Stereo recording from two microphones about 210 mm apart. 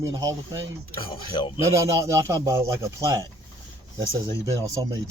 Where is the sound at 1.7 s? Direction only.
15° right (ahead or behind).